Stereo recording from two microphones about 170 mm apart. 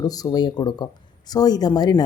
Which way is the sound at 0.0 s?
20° left (ahead or behind).